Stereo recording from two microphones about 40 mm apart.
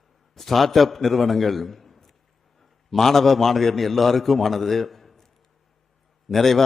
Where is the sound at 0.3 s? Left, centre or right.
Centre.